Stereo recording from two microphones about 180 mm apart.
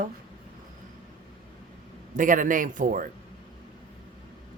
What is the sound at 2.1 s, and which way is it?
Speech, 45° right (ahead or behind).